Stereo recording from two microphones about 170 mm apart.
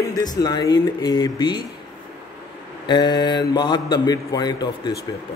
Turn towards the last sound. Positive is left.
turn(degrees=25)  # may be behind; listen again after turning